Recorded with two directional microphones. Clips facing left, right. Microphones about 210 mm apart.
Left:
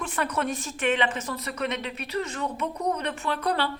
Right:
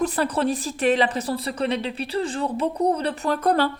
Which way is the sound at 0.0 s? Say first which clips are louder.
Right 6 dB; 35° right (ahead or behind).